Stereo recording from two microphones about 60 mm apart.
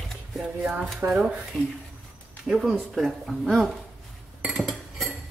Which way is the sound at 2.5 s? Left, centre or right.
Centre.